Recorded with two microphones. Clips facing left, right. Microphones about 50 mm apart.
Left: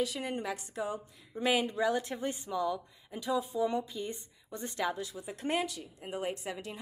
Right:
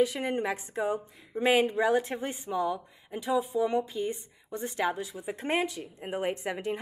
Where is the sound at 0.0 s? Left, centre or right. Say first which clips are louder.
Right 7 dB; right.